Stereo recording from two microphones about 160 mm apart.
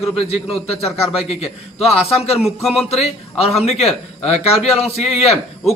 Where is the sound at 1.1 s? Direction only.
40° left (ahead or behind).